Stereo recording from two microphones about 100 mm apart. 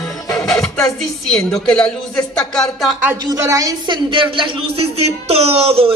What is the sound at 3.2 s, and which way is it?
Speech, 35° right (ahead or behind).